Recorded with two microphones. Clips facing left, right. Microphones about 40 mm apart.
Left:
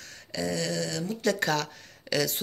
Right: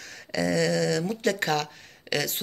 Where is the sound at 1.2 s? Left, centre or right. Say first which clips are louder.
Left 3 dB; right.